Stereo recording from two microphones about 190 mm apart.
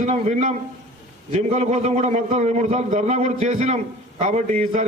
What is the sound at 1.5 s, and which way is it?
A man's voice, 35° right (ahead or behind).